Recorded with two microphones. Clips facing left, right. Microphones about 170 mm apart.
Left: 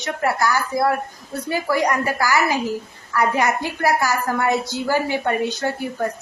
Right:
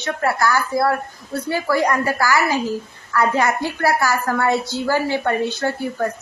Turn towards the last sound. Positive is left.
turn(degrees=15)  # may be behind; listen again after turning